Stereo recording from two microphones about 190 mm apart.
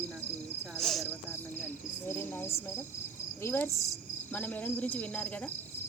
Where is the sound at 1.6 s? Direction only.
10° left (ahead or behind).